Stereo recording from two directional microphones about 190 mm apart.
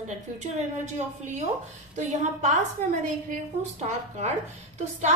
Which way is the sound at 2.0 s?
40° right (ahead or behind).